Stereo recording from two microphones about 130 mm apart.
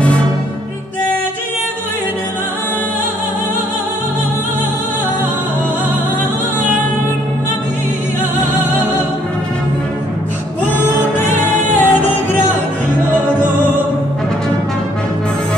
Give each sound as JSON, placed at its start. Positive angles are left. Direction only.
{"t": 10.8, "sound": "music", "side_deg": 15}